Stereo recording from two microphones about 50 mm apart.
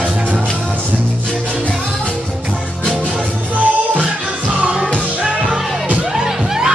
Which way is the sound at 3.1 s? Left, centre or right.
Right.